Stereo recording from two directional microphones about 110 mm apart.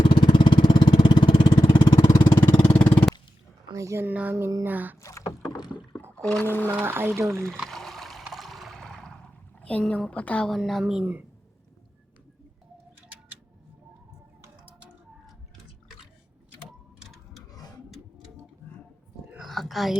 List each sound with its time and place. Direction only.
0.0 s vehicle: 45° left (ahead or behind)
2.7 s a sound: 15° left (ahead or behind)
3.7 s speech: 30° right (ahead or behind)
4.6 s a sound: 15° right (ahead or behind)
4.9 s rowboat: 30° left (ahead or behind)
6.4 s speech: 20° left (ahead or behind)
6.7 s speech: 20° right (ahead or behind)
7.7 s a sound: 5° left (ahead or behind)
10.6 s a woman's voice: centre (ahead or behind)
11.0 s speech: 15° right (ahead or behind)
16.6 s clock: centre (ahead or behind)
19.4 s a sound: centre (ahead or behind)